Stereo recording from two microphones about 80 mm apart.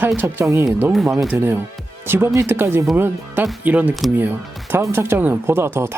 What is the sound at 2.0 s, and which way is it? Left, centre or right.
Speech, right.